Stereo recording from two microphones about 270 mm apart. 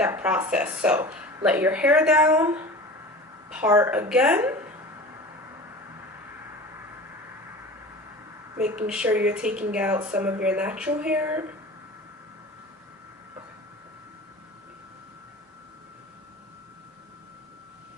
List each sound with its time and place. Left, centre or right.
0.0 s a woman's voice: centre
8.5 s speech: centre